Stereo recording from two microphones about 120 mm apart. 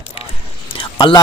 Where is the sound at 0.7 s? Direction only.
45° left (ahead or behind).